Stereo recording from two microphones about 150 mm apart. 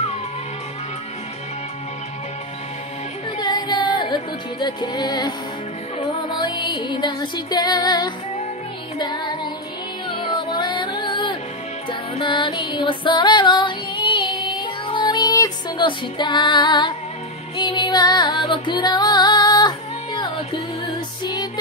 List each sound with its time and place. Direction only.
3.3 s music: 30° left (ahead or behind)
6.4 s music: 30° left (ahead or behind)
17.6 s female singing: 30° left (ahead or behind)
20.8 s music: 30° left (ahead or behind)